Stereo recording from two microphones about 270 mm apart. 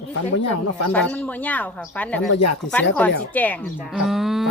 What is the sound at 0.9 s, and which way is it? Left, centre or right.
Speech, centre.